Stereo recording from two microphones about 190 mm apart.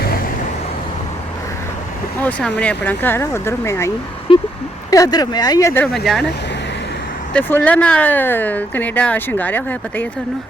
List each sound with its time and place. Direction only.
2.1 s speech: 5° left (ahead or behind)
4.3 s a sound: 30° left (ahead or behind)
4.9 s speech: 20° left (ahead or behind); by 6.2 s centre (ahead or behind)
7.3 s speech: 10° left (ahead or behind)